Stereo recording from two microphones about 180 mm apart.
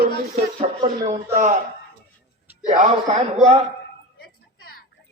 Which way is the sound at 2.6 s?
45° right (ahead or behind).